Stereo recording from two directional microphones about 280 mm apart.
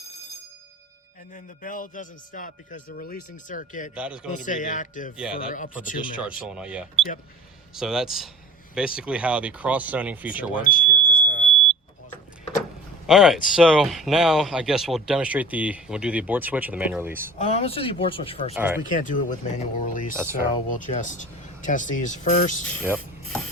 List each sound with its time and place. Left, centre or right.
1.3 s a man's voice: left
3.9 s speech: centre
4.4 s a man's voice: left
5.1 s speech: centre
5.4 s a man's voice: left
6.1 s speech: centre
10.6 s smoke detector: left
13.1 s speech: centre
17.3 s a man's voice: left
18.5 s speech: centre
18.9 s a man's voice: left